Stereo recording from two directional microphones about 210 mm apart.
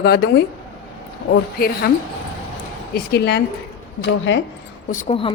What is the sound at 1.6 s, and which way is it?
Speech, 45° left (ahead or behind).